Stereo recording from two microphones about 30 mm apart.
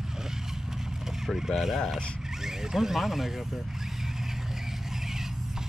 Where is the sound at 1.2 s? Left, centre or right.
Centre.